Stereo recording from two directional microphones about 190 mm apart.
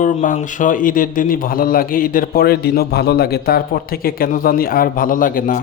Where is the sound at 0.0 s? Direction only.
45° left (ahead or behind).